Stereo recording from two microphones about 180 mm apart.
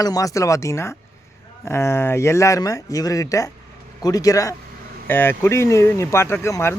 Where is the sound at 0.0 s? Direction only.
20° left (ahead or behind).